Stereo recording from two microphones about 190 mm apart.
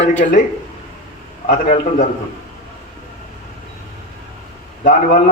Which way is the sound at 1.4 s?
40° left (ahead or behind).